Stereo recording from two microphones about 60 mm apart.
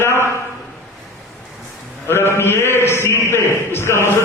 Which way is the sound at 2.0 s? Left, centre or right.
Left.